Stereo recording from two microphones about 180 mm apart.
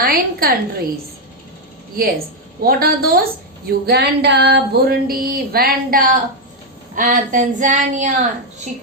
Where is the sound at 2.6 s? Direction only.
55° right (ahead or behind).